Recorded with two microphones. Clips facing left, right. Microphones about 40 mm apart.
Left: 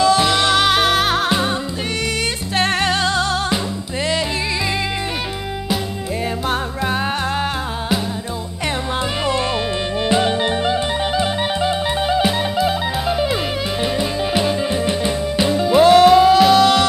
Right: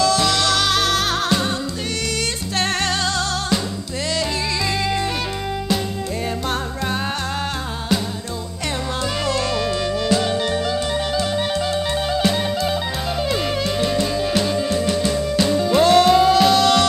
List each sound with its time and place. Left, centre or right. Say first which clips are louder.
0.0 s music: left 3 dB; left
2.5 s music: left 4 dB; centre
9.2 s music: left 1 dB; left; by 16.8 s centre